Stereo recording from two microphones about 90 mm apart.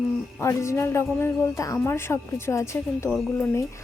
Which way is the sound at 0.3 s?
30° left (ahead or behind).